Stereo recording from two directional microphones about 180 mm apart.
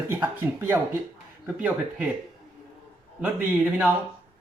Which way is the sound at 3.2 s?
10° right (ahead or behind).